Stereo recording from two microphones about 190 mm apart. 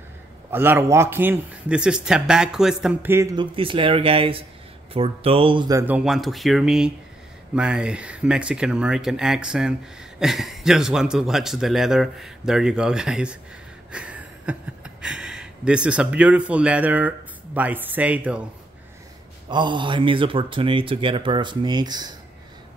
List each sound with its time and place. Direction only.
0.5 s a man's voice: 10° right (ahead or behind)
19.5 s speech: 25° right (ahead or behind)